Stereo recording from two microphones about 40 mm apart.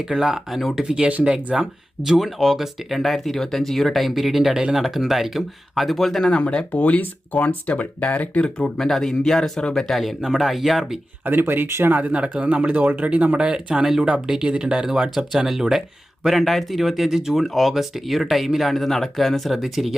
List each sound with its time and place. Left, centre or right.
0.2 s speech: centre
6.3 s speech: left
8.6 s speech: centre
11.3 s speech: right
11.9 s speech: right
12.1 s a man's voice: right
13.4 s speech: right
15.3 s speech: centre